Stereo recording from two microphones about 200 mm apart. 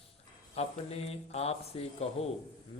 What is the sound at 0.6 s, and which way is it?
Speech, 30° left (ahead or behind).